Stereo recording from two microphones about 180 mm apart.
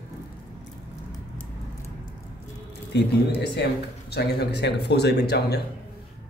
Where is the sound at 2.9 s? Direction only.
70° left (ahead or behind).